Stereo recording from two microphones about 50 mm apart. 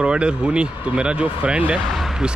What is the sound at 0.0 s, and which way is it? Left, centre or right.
Speech, centre.